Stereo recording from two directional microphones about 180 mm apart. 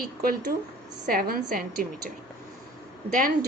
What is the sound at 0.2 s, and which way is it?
A woman's voice, 55° right (ahead or behind).